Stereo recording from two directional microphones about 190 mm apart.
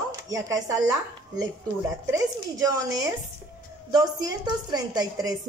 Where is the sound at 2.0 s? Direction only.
15° right (ahead or behind).